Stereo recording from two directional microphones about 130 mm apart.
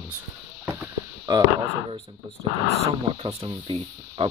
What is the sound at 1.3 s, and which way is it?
Speech, 35° right (ahead or behind).